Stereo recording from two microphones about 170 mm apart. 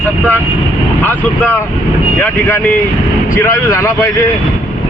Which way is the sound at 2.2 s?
10° left (ahead or behind).